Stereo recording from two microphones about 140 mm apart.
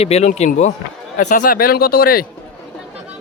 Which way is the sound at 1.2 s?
65° left (ahead or behind).